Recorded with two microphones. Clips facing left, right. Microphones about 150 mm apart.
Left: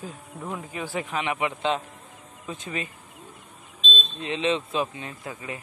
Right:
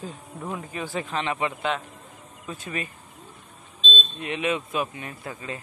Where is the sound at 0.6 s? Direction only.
10° left (ahead or behind).